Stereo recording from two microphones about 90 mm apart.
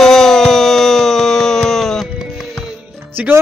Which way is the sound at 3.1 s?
20° right (ahead or behind).